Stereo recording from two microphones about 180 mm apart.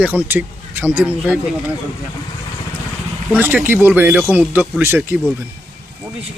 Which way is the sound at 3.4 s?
10° right (ahead or behind).